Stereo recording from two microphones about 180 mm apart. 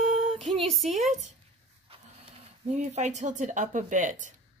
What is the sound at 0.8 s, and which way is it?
A woman's voice, 40° right (ahead or behind).